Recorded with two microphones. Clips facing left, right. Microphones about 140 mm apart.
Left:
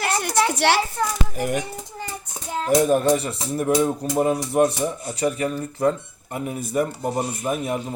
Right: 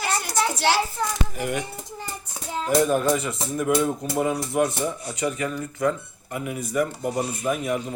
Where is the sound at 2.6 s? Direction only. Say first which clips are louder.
Left 3 dB; 30° left (ahead or behind).